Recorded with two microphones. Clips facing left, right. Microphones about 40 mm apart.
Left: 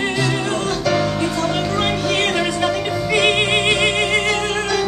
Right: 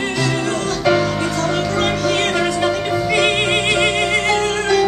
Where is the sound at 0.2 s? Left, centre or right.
Centre.